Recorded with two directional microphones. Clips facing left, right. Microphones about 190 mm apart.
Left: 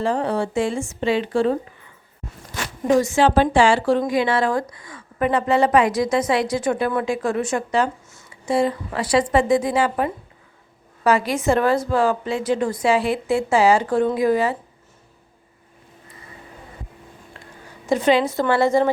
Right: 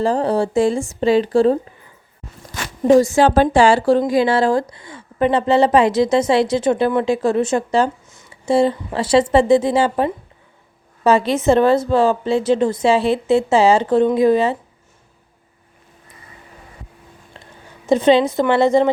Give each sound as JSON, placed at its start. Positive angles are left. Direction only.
{"t": 0.0, "sound": "speech", "side_deg": -35}
{"t": 2.8, "sound": "a woman's voice", "side_deg": -35}
{"t": 17.8, "sound": "a woman's voice", "side_deg": -20}